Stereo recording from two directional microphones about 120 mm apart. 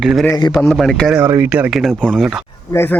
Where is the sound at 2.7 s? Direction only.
20° left (ahead or behind).